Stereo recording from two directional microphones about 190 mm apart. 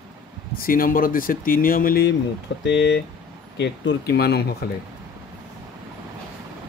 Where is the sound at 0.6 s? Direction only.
50° left (ahead or behind).